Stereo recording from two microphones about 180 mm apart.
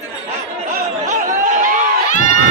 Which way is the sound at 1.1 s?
45° right (ahead or behind).